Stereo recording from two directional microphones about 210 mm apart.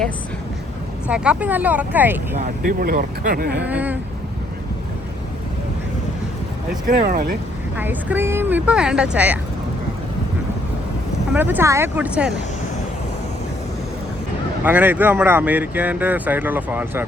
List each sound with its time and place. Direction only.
1.0 s speech: 5° right (ahead or behind)
2.3 s speech: 45° right (ahead or behind)
3.6 s speech: 5° right (ahead or behind)
6.8 s speech: 40° right (ahead or behind)
7.8 s speech: 10° right (ahead or behind)
11.3 s speech: 10° right (ahead or behind)
14.6 s speech: 10° right (ahead or behind)